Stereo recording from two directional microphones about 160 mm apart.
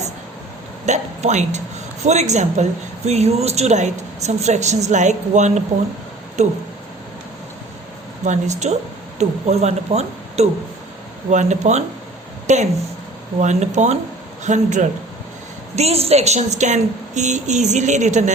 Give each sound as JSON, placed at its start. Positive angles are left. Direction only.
{"t": 0.9, "sound": "a woman's voice", "side_deg": -45}
{"t": 8.2, "sound": "a woman's voice", "side_deg": -45}